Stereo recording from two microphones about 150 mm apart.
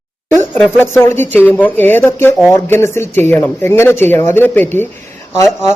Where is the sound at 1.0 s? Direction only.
15° left (ahead or behind).